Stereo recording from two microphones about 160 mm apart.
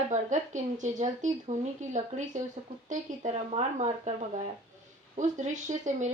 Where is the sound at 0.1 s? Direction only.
50° right (ahead or behind).